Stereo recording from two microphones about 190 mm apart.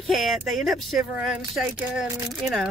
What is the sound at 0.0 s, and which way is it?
Speech, centre (ahead or behind).